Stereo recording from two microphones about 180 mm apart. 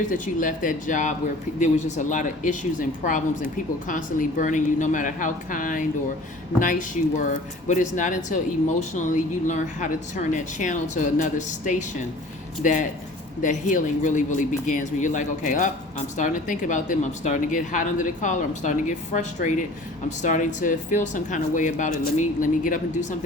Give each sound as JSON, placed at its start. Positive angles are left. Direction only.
{"t": 0.1, "sound": "speech", "side_deg": 45}